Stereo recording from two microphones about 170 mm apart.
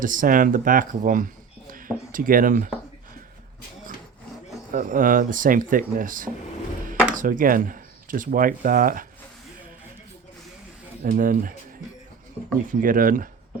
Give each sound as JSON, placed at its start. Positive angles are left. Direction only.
{"t": 0.0, "sound": "speech", "side_deg": -50}
{"t": 1.7, "sound": "a sound", "side_deg": -55}
{"t": 4.7, "sound": "speech", "side_deg": -55}
{"t": 11.0, "sound": "speech", "side_deg": -55}
{"t": 12.6, "sound": "speech", "side_deg": -55}